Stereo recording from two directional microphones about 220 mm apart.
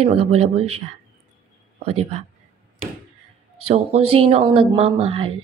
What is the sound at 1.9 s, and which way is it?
Speech, 30° right (ahead or behind).